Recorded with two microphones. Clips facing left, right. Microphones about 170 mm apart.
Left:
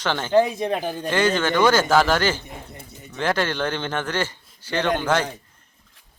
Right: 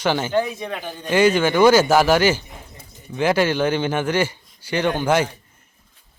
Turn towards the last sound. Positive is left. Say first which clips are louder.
# right 2 dB
turn(degrees=-10)  # may be behind; listen again after turning